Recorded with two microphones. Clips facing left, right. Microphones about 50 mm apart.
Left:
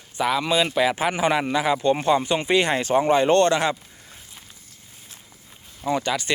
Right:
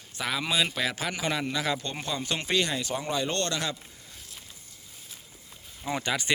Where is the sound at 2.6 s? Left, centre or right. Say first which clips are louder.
Left 10 dB; left.